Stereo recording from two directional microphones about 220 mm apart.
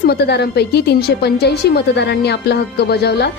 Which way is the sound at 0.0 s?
50° left (ahead or behind).